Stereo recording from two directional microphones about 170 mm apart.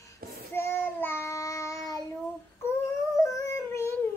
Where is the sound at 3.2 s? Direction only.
20° left (ahead or behind).